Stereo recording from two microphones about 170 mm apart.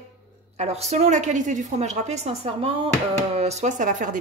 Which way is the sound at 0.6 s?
40° right (ahead or behind).